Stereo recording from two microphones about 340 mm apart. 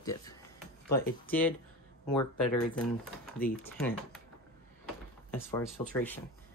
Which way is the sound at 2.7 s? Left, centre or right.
Centre.